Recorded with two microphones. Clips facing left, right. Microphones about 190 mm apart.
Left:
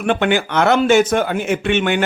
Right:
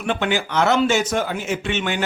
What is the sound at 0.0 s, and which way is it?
A man's voice, 60° left (ahead or behind).